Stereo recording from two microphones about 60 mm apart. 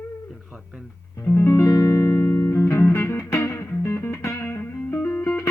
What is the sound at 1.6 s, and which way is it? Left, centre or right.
Music, left.